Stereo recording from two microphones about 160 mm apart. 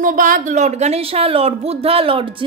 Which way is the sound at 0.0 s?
55° right (ahead or behind).